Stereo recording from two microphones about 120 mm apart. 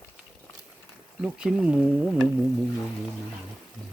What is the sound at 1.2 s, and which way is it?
Speech, 5° right (ahead or behind).